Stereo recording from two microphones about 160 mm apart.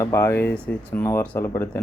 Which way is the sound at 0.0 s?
15° left (ahead or behind).